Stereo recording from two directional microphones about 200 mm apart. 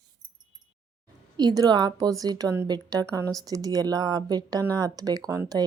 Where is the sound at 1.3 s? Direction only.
20° right (ahead or behind).